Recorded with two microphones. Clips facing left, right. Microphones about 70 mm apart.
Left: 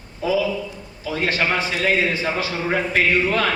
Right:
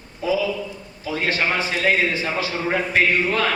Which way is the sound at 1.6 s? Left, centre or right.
Right.